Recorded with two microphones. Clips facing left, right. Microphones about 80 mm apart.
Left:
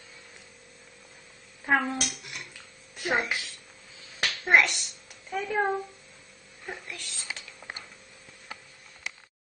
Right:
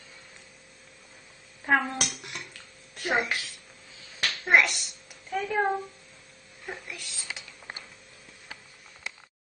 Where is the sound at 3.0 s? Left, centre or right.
Centre.